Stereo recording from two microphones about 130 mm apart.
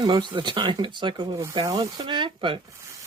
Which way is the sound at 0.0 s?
35° right (ahead or behind).